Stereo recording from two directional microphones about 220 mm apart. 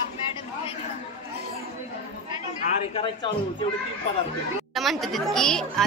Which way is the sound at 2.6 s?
25° left (ahead or behind).